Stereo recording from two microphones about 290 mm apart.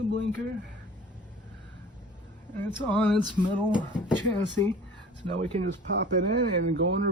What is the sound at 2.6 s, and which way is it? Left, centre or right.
Speech, centre.